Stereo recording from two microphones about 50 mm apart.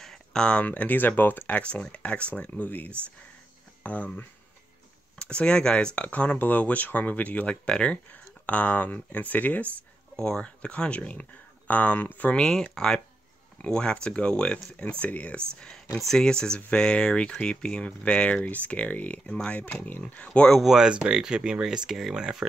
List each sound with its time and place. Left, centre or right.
0.0 s a sound: centre
0.7 s speech: left
1.5 s speech: left
5.2 s speech: left
7.6 s speech: centre
8.1 s speech: left
10.1 s speech: centre; by 12.4 s left
12.4 s speech: centre
16.1 s speech: centre
20.6 s speech: centre